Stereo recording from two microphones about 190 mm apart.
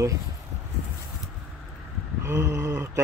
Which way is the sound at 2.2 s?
15° right (ahead or behind).